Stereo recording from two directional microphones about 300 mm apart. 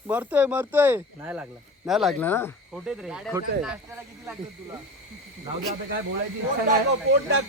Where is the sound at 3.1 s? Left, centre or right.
Centre.